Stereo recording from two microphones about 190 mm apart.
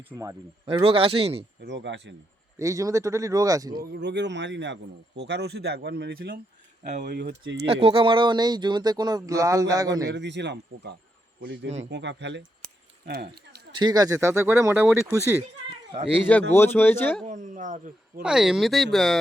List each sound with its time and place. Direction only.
0.1 s speech: 15° right (ahead or behind)
0.9 s speech: 30° right (ahead or behind)
1.6 s speech: 70° right (ahead or behind)
2.6 s speech: 15° right (ahead or behind)
3.8 s a man's voice: 65° right (ahead or behind)
7.7 s speech: 30° right (ahead or behind)
10.2 s speech: 70° right (ahead or behind)
13.7 s speech: 20° right (ahead or behind)
16.5 s speech: 10° left (ahead or behind)
17.2 s speech: 40° right (ahead or behind)
18.2 s speech: 5° right (ahead or behind)